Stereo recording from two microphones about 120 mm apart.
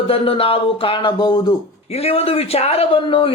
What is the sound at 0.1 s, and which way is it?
Speech, 50° left (ahead or behind).